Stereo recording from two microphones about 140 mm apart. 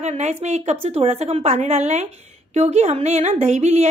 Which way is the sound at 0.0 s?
50° right (ahead or behind).